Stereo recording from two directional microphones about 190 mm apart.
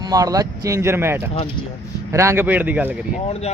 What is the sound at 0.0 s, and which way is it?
Speech, 20° right (ahead or behind).